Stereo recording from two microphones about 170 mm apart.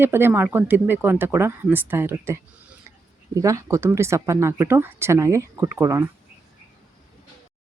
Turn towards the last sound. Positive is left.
turn(degrees=-15)  # may be behind; listen again after turning